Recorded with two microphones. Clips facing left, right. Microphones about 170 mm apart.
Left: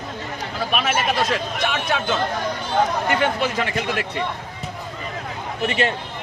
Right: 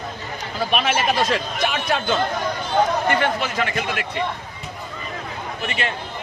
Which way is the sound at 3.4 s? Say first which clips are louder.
Left 1 dB; 25° left (ahead or behind).